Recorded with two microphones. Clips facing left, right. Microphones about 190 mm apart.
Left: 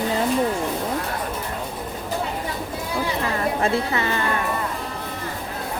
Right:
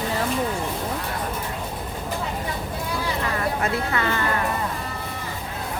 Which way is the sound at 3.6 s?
25° left (ahead or behind).